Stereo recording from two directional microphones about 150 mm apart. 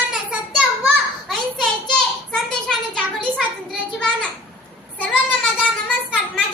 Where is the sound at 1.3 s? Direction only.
5° left (ahead or behind).